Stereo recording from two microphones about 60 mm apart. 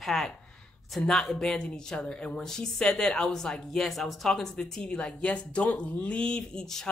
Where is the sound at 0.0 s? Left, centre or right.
Centre.